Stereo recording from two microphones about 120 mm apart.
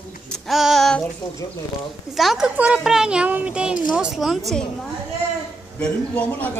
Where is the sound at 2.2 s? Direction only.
Centre (ahead or behind).